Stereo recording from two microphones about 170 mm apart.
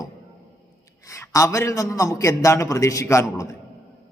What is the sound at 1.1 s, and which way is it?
A man's voice, 20° left (ahead or behind).